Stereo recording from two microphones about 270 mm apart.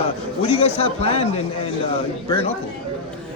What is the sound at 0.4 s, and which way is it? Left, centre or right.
Speech, left.